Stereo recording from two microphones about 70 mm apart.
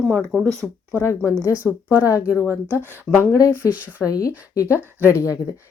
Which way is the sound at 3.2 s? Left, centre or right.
Left.